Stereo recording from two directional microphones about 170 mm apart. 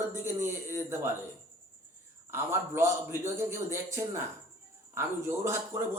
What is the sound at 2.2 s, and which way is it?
Speech, 15° right (ahead or behind).